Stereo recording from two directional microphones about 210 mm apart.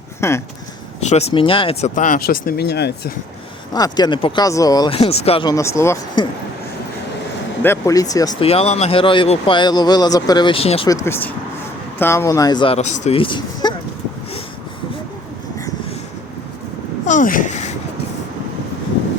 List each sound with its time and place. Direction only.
0.2 s speech: 10° left (ahead or behind)
1.0 s speech: 30° left (ahead or behind); by 3.1 s 50° left (ahead or behind)
3.7 s speech: 20° left (ahead or behind)
7.6 s speech: 15° left (ahead or behind)
8.4 s speech: 30° left (ahead or behind)
10.8 s speech: 15° left (ahead or behind)
17.1 s a sound: 40° left (ahead or behind)